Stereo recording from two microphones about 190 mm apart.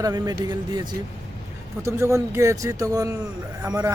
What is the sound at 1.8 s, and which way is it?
Speech, 15° right (ahead or behind).